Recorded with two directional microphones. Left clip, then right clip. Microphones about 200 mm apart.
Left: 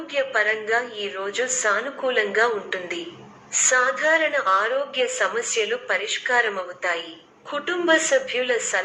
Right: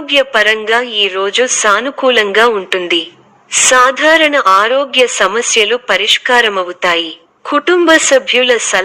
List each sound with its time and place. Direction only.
0.1 s a woman's voice: 45° right (ahead or behind)